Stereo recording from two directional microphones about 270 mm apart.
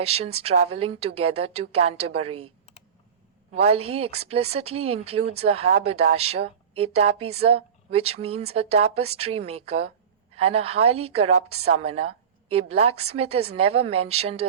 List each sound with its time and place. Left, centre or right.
0.0 s a woman's voice: right
3.6 s a woman's voice: right